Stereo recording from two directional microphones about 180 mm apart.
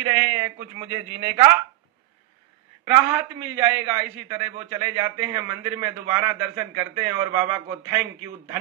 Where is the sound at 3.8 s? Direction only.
25° right (ahead or behind).